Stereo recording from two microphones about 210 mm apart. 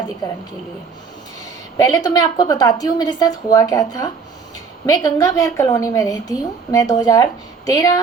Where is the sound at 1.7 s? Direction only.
15° left (ahead or behind).